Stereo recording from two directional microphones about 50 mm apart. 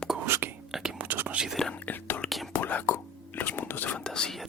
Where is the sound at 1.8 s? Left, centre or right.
Left.